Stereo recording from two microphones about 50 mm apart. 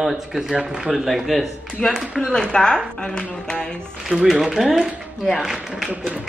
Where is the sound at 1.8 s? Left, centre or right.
Centre.